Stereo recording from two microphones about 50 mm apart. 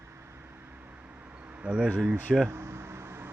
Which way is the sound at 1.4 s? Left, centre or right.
Right.